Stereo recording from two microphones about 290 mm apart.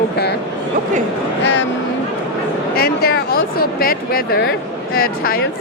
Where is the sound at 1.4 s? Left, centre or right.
Left.